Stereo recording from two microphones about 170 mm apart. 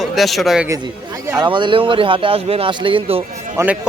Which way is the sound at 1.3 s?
30° right (ahead or behind).